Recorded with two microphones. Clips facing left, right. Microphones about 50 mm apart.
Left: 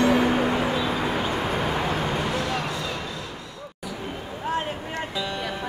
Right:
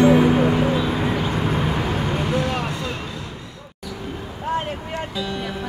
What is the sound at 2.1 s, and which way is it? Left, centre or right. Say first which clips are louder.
Vehicle: right 3 dB; right.